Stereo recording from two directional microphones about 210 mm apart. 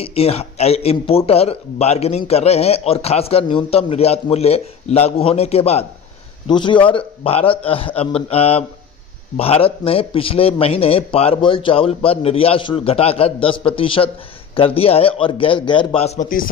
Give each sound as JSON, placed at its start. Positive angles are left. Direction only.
{"t": 0.0, "sound": "a man's voice", "side_deg": 30}